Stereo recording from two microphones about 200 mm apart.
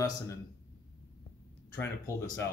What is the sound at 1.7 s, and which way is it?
Speech, 10° left (ahead or behind).